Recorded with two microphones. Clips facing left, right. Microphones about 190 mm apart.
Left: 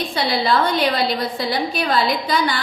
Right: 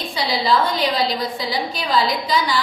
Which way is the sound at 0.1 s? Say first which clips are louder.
Right 1 dB; 60° left (ahead or behind).